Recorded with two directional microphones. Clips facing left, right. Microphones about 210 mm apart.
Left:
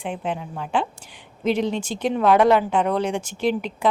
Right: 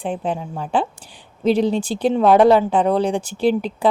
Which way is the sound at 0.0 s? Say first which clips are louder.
Right 4 dB; 35° right (ahead or behind).